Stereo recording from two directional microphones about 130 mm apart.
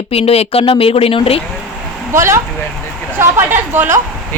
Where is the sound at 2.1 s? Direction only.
20° right (ahead or behind).